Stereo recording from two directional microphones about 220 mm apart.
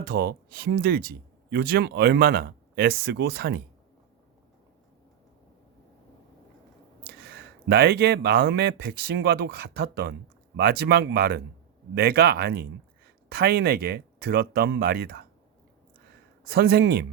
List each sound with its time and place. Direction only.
0.0 s speech: 45° right (ahead or behind)
7.0 s speech: 50° right (ahead or behind)
16.4 s speech: 45° right (ahead or behind)